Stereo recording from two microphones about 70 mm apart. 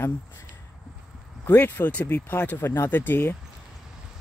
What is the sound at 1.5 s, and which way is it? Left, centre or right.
Speech, left.